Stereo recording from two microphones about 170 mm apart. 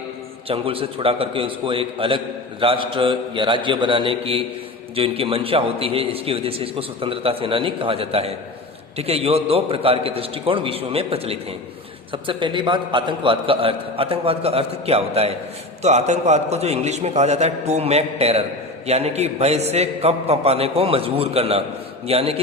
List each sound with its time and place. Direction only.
0.4 s a man's voice: 35° right (ahead or behind)